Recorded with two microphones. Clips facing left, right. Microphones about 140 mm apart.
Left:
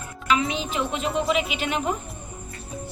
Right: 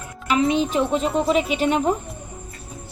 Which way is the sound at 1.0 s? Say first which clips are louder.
Right 4 dB; centre (ahead or behind).